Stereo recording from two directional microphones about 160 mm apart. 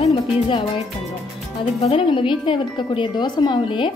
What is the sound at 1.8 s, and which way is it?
A woman's voice, 35° left (ahead or behind).